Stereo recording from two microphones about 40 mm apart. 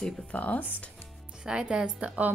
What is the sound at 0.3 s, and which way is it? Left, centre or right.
Speech, left.